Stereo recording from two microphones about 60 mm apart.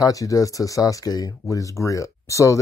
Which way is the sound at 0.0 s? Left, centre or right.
Left.